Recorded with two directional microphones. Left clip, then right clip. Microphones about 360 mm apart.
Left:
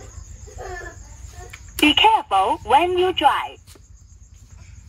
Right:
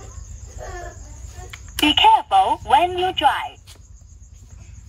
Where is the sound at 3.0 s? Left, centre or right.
Centre.